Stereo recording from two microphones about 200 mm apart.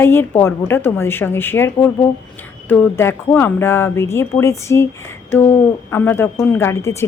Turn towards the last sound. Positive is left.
turn(degrees=15)  # may be behind; listen again after turning